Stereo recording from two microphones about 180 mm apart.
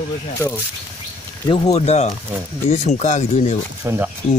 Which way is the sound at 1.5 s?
35° left (ahead or behind).